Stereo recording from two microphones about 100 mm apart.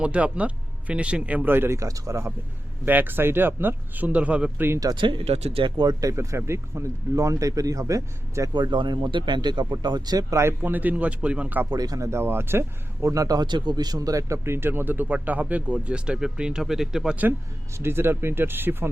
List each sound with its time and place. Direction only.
0.0 s speech: 10° right (ahead or behind); by 2.3 s 30° right (ahead or behind)
2.8 s speech: 20° right (ahead or behind)
4.9 s speech: 55° right (ahead or behind)
5.3 s speech: 90° right
5.6 s speech: 50° right (ahead or behind); by 8.4 s 30° right (ahead or behind)
8.5 s speech: 50° right (ahead or behind); by 10.5 s 30° right (ahead or behind)
10.6 s speech: 15° right (ahead or behind)
11.7 s speech: 40° right (ahead or behind); by 17.2 s 5° right (ahead or behind)
17.7 s speech: 25° right (ahead or behind)